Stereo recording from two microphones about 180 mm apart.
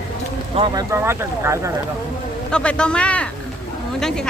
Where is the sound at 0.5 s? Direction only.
30° right (ahead or behind).